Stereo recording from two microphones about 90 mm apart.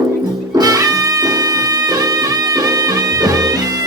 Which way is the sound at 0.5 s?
45° right (ahead or behind).